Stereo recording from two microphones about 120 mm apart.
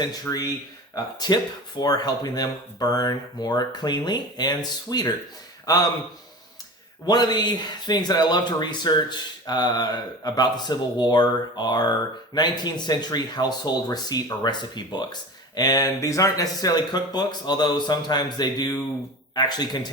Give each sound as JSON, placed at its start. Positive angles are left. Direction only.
{"t": 0.0, "sound": "speech", "side_deg": 30}
{"t": 7.0, "sound": "speech", "side_deg": 35}